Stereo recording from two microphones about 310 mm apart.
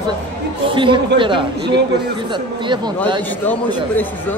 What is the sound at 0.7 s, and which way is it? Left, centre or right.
Speech, centre.